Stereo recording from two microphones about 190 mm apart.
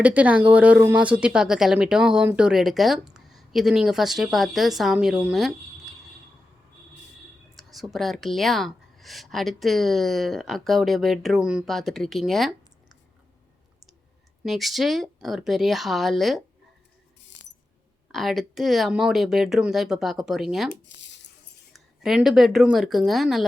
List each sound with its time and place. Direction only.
0.0 s speech: 10° right (ahead or behind)
7.5 s speech: centre (ahead or behind)
14.4 s speech: centre (ahead or behind)
17.4 s coin: 70° left (ahead or behind)
18.1 s speech: centre (ahead or behind)
20.8 s a sound: 70° left (ahead or behind)
21.7 s speech: centre (ahead or behind)